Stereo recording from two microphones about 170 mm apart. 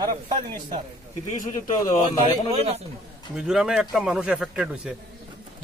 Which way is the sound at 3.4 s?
5° right (ahead or behind).